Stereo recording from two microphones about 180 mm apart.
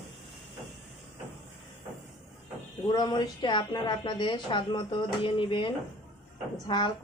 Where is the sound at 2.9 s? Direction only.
25° left (ahead or behind).